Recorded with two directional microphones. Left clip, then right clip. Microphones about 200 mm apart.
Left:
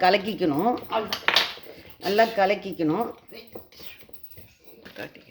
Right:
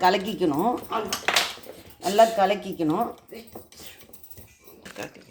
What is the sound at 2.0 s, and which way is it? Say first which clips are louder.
Speech: right 2 dB; 30° left (ahead or behind).